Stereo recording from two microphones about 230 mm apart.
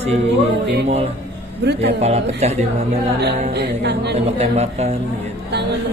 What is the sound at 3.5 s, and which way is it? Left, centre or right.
Speech, right.